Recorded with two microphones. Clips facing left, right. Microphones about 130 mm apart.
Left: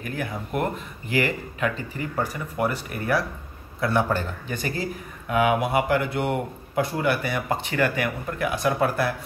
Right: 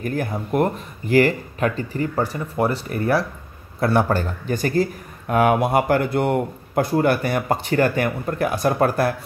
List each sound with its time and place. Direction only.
0.0 s speech: 40° right (ahead or behind)
3.8 s a man's voice: 40° right (ahead or behind)